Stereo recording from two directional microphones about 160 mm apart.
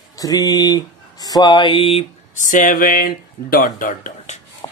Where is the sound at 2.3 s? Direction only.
55° left (ahead or behind).